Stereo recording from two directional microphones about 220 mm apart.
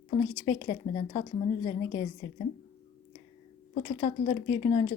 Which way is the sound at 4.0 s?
30° left (ahead or behind).